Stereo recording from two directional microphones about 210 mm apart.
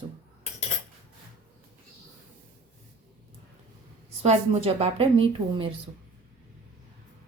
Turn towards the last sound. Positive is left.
turn(degrees=-25)  # may be behind; listen again after turning